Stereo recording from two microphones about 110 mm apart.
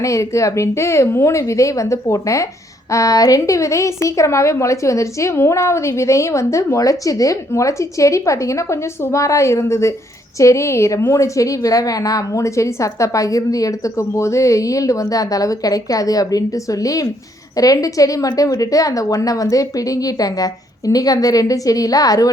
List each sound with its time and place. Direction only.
0.0 s a woman's voice: 30° left (ahead or behind)